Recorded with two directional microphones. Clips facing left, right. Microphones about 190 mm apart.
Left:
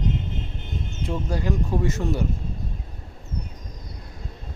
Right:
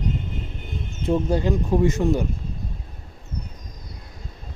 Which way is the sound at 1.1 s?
25° right (ahead or behind).